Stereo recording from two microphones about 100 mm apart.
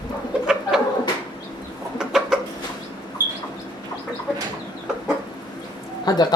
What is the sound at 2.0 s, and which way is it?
Chicken, 5° right (ahead or behind).